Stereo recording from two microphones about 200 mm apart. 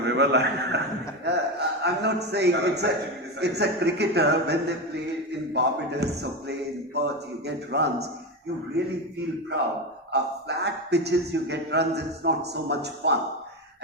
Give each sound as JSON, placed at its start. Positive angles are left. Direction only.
{"t": 0.0, "sound": "a man's voice", "side_deg": -55}
{"t": 5.5, "sound": "speech", "side_deg": -55}
{"t": 10.1, "sound": "speech", "side_deg": -55}